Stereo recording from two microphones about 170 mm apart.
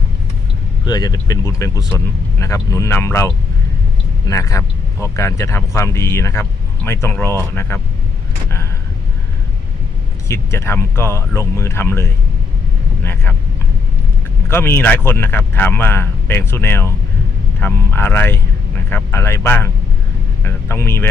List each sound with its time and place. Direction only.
0.9 s speech: 25° left (ahead or behind)
10.2 s speech: 15° left (ahead or behind)
14.4 s speech: 15° left (ahead or behind)